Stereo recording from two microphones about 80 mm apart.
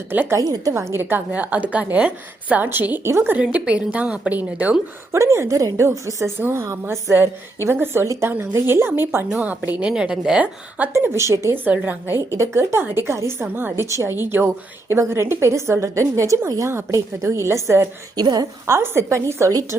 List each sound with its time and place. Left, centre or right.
0.1 s a woman's voice: right
0.3 s a woman's voice: right
0.7 s a woman's voice: right
1.3 s a woman's voice: centre
3.3 s a woman's voice: centre
5.1 s a woman's voice: right
8.6 s a woman's voice: right
9.9 s a woman's voice: centre
10.9 s a woman's voice: right
11.5 s a woman's voice: right
12.3 s a woman's voice: right
18.2 s a woman's voice: right
18.6 s a woman's voice: right